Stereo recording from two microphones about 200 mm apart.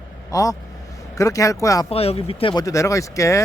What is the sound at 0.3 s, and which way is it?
Speech, 15° left (ahead or behind).